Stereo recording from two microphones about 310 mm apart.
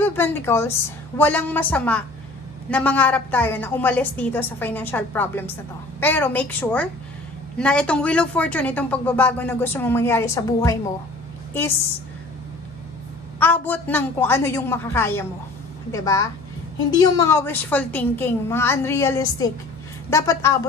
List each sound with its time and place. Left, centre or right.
0.0 s a woman's voice: centre
13.4 s a woman's voice: centre